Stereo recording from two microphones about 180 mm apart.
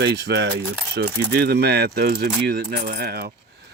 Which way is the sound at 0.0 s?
70° right (ahead or behind).